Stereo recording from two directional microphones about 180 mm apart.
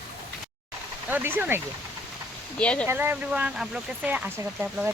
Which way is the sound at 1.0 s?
10° right (ahead or behind).